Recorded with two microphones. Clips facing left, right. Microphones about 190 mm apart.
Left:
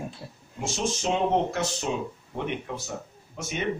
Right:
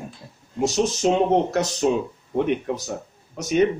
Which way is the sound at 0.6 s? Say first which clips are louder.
Right 8 dB; 40° right (ahead or behind).